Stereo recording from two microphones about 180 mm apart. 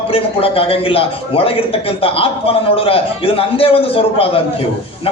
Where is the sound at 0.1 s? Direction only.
30° left (ahead or behind).